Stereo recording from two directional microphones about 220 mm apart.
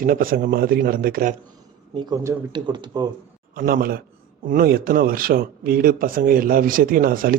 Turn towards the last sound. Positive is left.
turn(degrees=-40)  # may be behind; listen again after turning